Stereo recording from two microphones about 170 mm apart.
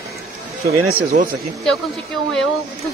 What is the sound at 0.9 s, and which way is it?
Speech, 55° right (ahead or behind).